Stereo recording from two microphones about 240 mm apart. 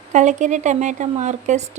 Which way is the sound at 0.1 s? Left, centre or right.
Right.